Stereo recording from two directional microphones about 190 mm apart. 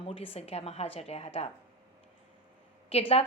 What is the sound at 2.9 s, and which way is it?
Speech, 30° left (ahead or behind).